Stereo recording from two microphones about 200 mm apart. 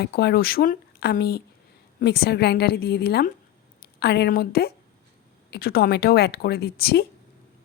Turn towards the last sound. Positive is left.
turn(degrees=50)  # may be behind; listen again after turning